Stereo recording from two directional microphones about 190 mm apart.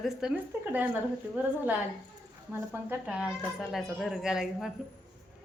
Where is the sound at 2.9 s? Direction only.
5° right (ahead or behind).